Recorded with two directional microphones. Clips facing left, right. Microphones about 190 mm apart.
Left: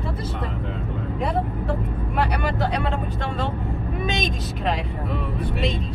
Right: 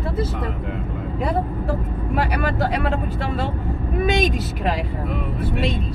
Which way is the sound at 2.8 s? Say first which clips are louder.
Right 3 dB; 5° right (ahead or behind).